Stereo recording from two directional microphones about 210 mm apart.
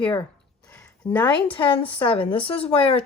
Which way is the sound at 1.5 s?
25° left (ahead or behind).